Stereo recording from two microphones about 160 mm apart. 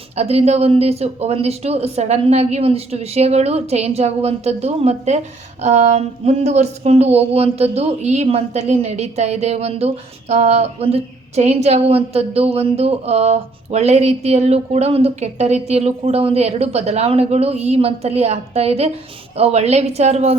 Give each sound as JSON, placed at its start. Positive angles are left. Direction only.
{"t": 0.2, "sound": "a woman's voice", "side_deg": -40}